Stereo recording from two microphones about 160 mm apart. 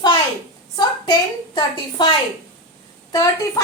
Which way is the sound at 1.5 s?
30° left (ahead or behind).